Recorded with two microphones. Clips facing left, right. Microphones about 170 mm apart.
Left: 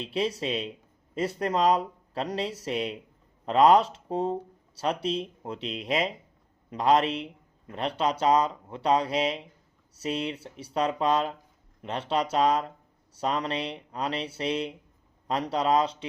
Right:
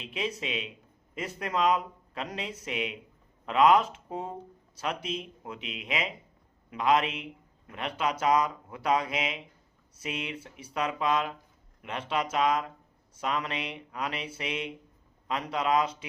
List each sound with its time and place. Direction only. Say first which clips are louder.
0.0 s speech: left 5 dB; 35° left (ahead or behind)